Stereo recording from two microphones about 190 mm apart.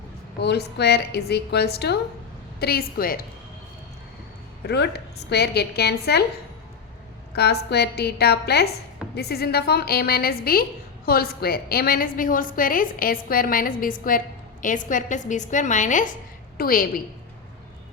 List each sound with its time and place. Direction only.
0.3 s a woman's voice: 60° left (ahead or behind)
4.6 s a woman's voice: 60° left (ahead or behind)
7.3 s a woman's voice: 60° left (ahead or behind)